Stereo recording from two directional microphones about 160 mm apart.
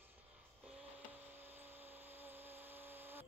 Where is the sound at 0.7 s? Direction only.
10° right (ahead or behind).